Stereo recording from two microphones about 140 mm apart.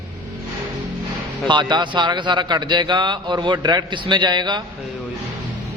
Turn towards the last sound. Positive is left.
turn(degrees=-30)  # may be behind; listen again after turning